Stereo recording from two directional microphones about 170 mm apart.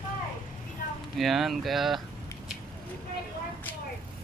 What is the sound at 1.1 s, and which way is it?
Speech, centre (ahead or behind).